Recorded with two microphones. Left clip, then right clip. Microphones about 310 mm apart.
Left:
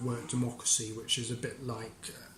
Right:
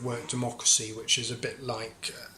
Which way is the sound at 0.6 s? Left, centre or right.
Centre.